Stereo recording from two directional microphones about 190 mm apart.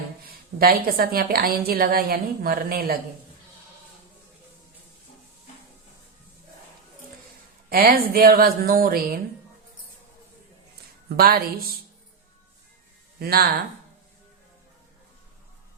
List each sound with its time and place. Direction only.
0.3 s a woman's voice: 50° right (ahead or behind)
7.7 s a woman's voice: 50° right (ahead or behind)
11.2 s a woman's voice: 50° right (ahead or behind)
13.1 s speech: 55° right (ahead or behind)